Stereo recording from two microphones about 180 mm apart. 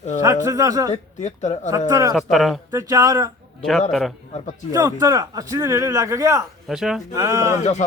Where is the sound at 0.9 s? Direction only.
40° left (ahead or behind).